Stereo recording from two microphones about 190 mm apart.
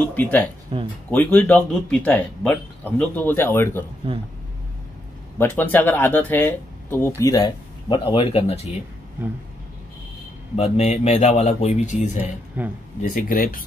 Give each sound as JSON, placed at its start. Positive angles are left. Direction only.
{"t": 0.1, "sound": "speech", "side_deg": 10}
{"t": 0.7, "sound": "speech", "side_deg": -25}
{"t": 1.1, "sound": "speech", "side_deg": 10}
{"t": 4.0, "sound": "speech", "side_deg": -30}
{"t": 5.4, "sound": "speech", "side_deg": 10}
{"t": 10.5, "sound": "speech", "side_deg": 35}